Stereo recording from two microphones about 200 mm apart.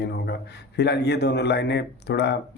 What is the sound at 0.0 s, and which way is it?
A man's voice, 55° left (ahead or behind).